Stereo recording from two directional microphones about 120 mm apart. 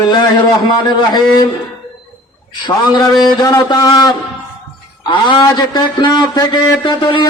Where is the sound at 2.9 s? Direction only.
35° left (ahead or behind).